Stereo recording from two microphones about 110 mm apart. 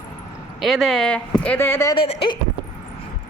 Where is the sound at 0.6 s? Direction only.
Centre (ahead or behind); by 1.9 s 20° left (ahead or behind).